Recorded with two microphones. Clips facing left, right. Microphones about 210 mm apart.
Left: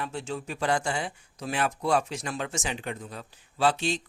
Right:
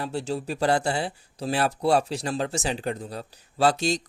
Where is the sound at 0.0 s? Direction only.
35° right (ahead or behind).